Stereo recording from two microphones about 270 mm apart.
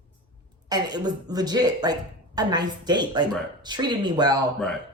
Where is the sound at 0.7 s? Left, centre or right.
Centre.